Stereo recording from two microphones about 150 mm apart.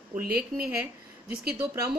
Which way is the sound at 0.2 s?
90° right.